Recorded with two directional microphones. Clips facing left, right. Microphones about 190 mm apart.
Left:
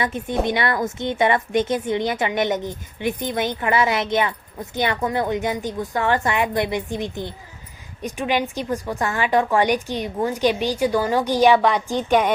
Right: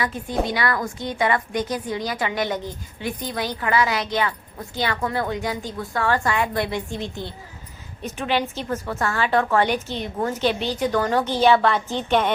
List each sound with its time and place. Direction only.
0.0 s a woman's voice: 20° left (ahead or behind)